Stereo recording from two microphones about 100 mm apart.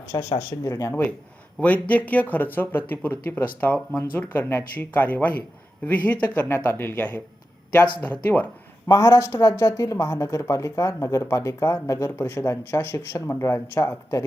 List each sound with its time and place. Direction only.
0.1 s speech: 35° left (ahead or behind)
1.6 s speech: 15° left (ahead or behind)
8.2 s speech: 20° left (ahead or behind)
8.9 s speech: 30° left (ahead or behind)